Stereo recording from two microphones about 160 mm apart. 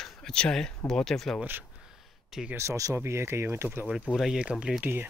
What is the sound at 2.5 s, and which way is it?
Speech, 20° right (ahead or behind).